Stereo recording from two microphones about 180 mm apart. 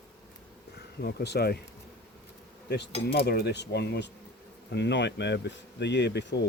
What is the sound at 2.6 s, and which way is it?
Speech, 70° left (ahead or behind).